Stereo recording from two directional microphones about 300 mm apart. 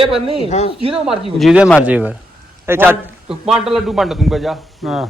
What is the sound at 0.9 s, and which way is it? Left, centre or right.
A man's voice, centre.